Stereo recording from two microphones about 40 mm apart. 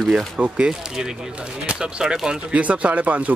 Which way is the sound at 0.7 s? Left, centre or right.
Centre.